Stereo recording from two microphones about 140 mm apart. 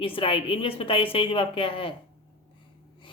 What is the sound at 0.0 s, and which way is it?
Speech, 40° left (ahead or behind).